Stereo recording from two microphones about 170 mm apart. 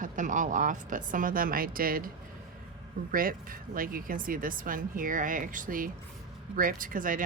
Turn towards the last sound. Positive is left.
turn(degrees=-55)  # may be behind; listen again after turning